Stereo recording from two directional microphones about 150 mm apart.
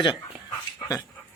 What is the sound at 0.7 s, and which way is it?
Dog, 25° left (ahead or behind).